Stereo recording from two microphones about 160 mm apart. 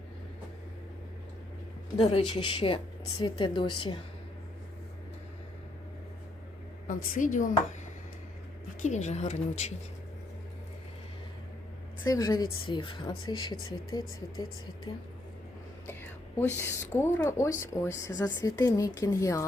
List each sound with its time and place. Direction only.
2.0 s speech: 35° left (ahead or behind)
6.8 s a woman's voice: 60° left (ahead or behind)
8.8 s speech: 45° left (ahead or behind)
12.0 s speech: 20° left (ahead or behind)
16.4 s speech: 15° left (ahead or behind)